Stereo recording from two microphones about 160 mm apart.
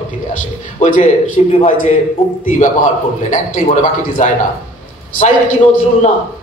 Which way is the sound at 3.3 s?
50° left (ahead or behind).